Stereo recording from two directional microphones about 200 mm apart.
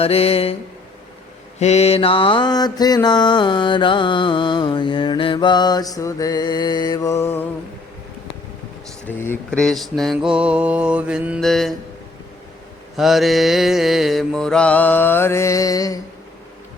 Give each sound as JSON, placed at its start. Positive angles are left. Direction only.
{"t": 0.0, "sound": "mantra", "side_deg": 30}
{"t": 1.5, "sound": "mantra", "side_deg": 35}
{"t": 9.0, "sound": "mantra", "side_deg": 10}
{"t": 13.0, "sound": "mantra", "side_deg": 0}